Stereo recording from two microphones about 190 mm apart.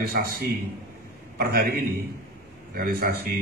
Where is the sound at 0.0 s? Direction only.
55° right (ahead or behind).